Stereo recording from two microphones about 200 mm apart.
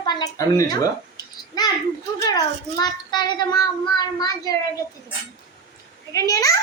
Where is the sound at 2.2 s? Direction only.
20° left (ahead or behind).